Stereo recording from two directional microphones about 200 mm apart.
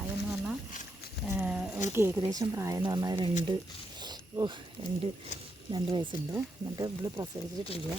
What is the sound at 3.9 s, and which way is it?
Wild animals, 20° right (ahead or behind).